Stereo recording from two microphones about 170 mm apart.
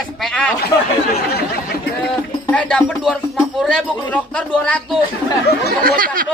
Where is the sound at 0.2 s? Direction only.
5° left (ahead or behind).